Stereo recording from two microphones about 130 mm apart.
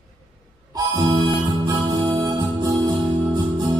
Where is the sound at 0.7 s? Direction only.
30° right (ahead or behind).